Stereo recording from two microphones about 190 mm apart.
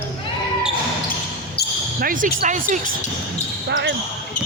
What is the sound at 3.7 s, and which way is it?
Speech, 65° right (ahead or behind).